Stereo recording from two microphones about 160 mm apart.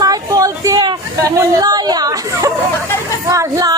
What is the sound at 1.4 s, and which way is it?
Speech, 25° right (ahead or behind).